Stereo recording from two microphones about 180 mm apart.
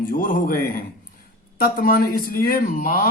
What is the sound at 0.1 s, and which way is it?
A man's voice, 50° left (ahead or behind).